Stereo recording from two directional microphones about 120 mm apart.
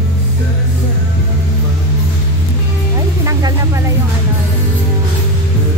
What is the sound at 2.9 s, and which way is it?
Music, 25° right (ahead or behind).